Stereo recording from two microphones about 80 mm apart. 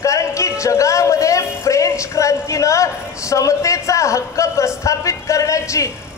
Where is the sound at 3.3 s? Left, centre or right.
Left.